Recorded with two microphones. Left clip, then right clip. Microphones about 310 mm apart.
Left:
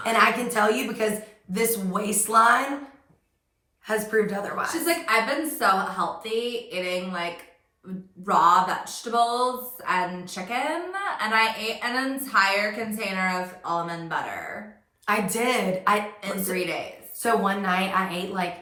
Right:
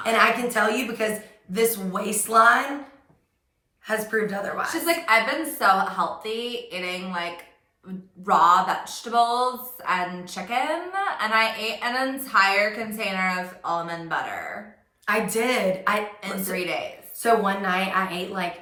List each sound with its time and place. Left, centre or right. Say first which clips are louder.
0.0 s a woman's voice: right 1 dB; centre
3.8 s a woman's voice: left 1 dB; centre
4.9 s speech: right 3 dB; centre
15.0 s a woman's voice: right 1 dB; centre
16.2 s a woman's voice: even; centre